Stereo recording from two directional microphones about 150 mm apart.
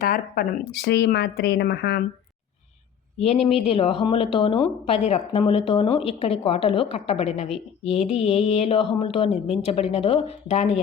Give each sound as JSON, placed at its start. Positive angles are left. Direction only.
{"t": 0.0, "sound": "speech", "side_deg": 75}
{"t": 3.4, "sound": "speech", "side_deg": 40}